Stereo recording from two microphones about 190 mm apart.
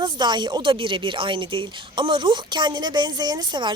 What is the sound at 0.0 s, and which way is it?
Speech, 25° right (ahead or behind).